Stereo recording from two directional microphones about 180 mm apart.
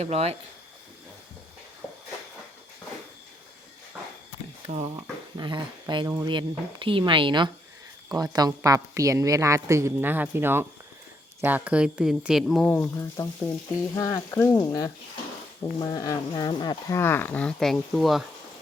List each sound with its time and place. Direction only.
0.0 s speech: 35° right (ahead or behind)
1.8 s a sound: 15° left (ahead or behind)
3.9 s walk: 5° right (ahead or behind)
5.4 s a woman's voice: 25° right (ahead or behind); by 18.2 s centre (ahead or behind)